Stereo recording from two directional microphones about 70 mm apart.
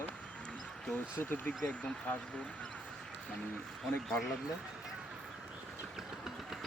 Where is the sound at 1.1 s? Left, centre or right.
Left.